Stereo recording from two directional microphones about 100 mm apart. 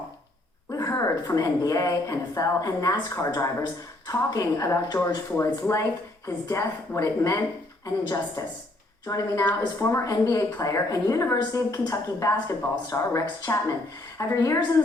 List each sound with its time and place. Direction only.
0.7 s a woman's voice: 30° left (ahead or behind)